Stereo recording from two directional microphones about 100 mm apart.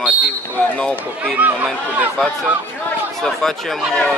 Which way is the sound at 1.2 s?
15° right (ahead or behind).